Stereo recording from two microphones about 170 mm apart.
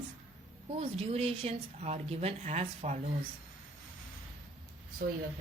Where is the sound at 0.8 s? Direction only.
35° right (ahead or behind).